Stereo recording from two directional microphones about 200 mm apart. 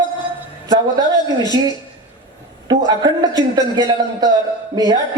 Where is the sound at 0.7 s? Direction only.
20° right (ahead or behind).